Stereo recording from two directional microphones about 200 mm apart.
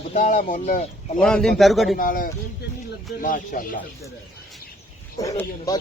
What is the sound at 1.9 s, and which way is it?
Speech, 45° left (ahead or behind).